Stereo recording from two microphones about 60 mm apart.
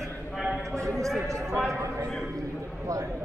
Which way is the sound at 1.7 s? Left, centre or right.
Right.